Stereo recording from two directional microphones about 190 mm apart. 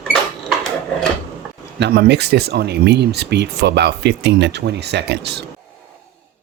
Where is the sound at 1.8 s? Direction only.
60° right (ahead or behind).